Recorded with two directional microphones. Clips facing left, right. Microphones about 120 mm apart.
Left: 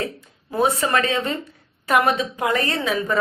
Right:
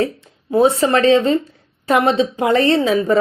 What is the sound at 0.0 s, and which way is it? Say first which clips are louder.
Speech: right 8 dB; 25° right (ahead or behind).